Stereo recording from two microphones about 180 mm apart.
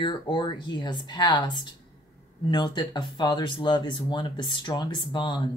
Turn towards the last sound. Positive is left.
turn(degrees=25)  # may be behind; listen again after turning